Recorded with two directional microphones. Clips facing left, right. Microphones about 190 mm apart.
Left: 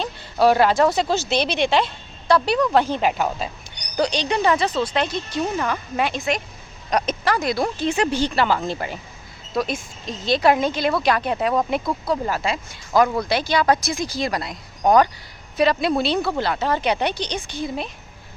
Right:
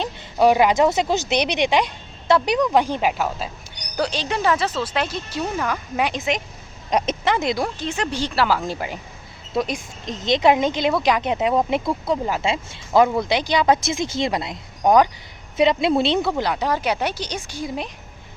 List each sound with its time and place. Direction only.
0.0 s speech: 15° right (ahead or behind)
7.6 s speech: 10° left (ahead or behind)
8.1 s a woman's voice: centre (ahead or behind); by 14.6 s 25° right (ahead or behind)
14.8 s speech: 10° right (ahead or behind)